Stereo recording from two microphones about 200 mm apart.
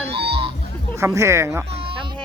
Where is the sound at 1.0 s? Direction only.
15° right (ahead or behind).